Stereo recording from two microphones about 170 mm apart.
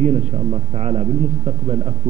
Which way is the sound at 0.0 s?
40° right (ahead or behind).